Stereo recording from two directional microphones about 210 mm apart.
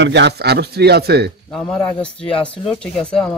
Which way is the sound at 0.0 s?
55° right (ahead or behind).